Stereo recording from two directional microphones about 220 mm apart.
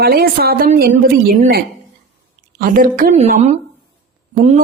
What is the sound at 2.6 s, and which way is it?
A woman's voice, 40° right (ahead or behind).